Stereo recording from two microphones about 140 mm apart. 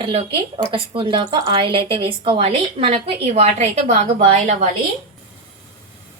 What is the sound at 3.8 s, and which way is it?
Speech, 65° right (ahead or behind).